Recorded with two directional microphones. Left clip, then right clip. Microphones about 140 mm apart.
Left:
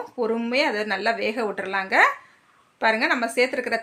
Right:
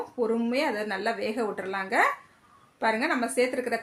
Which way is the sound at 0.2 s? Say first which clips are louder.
Left 4 dB; 20° left (ahead or behind).